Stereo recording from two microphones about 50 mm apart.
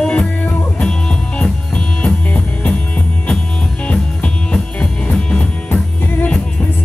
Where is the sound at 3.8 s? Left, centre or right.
Left.